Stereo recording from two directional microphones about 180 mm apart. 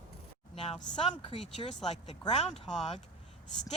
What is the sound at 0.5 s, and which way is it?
A woman's voice, 35° left (ahead or behind).